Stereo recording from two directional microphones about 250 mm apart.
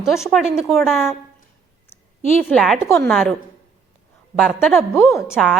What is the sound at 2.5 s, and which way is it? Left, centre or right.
Speech, centre.